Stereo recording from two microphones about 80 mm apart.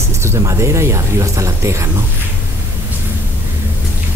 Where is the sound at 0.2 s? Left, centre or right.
Right.